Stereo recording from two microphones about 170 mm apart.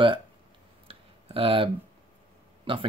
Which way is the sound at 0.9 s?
35° right (ahead or behind).